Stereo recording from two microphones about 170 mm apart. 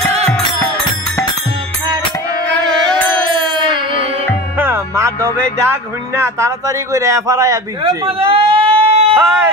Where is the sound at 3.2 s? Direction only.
25° right (ahead or behind).